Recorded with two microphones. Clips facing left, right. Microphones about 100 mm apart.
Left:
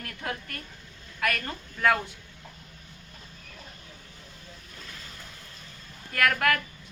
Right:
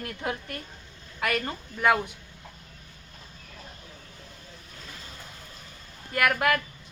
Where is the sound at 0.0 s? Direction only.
20° right (ahead or behind).